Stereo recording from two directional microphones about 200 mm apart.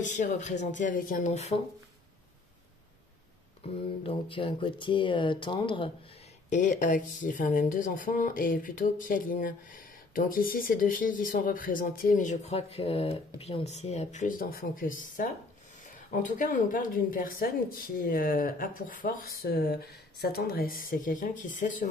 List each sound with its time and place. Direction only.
0.0 s speech: 40° left (ahead or behind)
3.6 s speech: 30° left (ahead or behind)
6.5 s speech: 40° left (ahead or behind)